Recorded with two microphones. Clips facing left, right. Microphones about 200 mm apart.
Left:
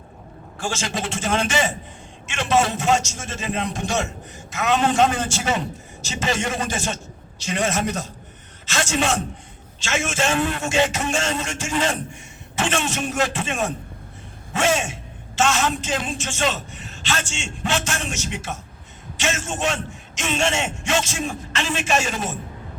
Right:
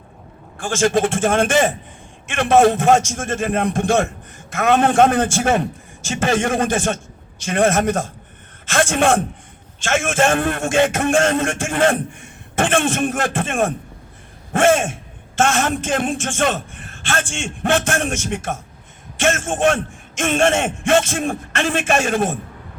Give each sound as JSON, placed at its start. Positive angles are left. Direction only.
{"t": 0.6, "sound": "a man's voice", "side_deg": -50}